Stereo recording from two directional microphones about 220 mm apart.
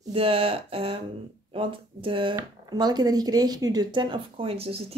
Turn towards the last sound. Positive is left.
turn(degrees=-25)  # may be behind; listen again after turning